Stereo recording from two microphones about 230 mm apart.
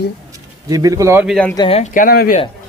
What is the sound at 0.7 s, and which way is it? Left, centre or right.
Speech, centre.